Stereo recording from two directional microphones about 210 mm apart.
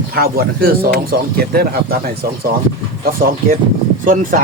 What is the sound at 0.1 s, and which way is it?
Speech, 45° right (ahead or behind).